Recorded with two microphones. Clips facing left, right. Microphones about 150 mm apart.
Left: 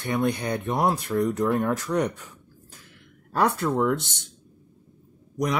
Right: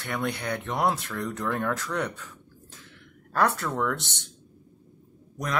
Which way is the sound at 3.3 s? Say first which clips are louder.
Left 3 dB; 15° left (ahead or behind).